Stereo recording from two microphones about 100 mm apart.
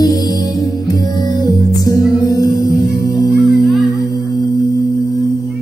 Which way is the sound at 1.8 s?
40° left (ahead or behind).